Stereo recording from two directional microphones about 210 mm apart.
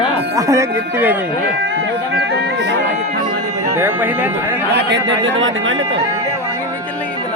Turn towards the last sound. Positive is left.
turn(degrees=-65)  # may be behind; listen again after turning